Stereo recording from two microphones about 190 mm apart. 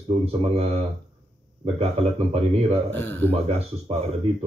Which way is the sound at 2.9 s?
10° left (ahead or behind).